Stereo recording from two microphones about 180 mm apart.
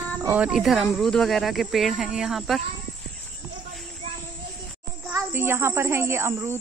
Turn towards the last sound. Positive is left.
turn(degrees=-15)  # may be behind; listen again after turning